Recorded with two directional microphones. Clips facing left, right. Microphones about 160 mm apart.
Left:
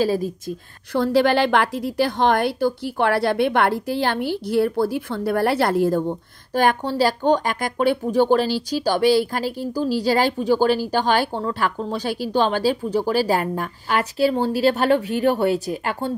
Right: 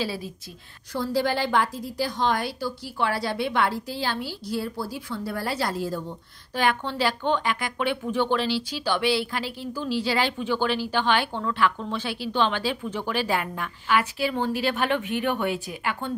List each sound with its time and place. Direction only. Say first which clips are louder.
0.0 s speech: left 10 dB; 45° left (ahead or behind)
0.9 s a woman's voice: left 8 dB; 70° left (ahead or behind); by 16.1 s 40° left (ahead or behind)